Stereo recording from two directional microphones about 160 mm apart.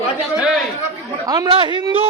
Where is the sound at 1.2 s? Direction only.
25° right (ahead or behind).